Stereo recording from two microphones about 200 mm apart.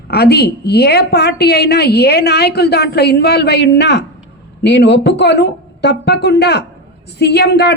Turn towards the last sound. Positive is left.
turn(degrees=55)  # may be behind; listen again after turning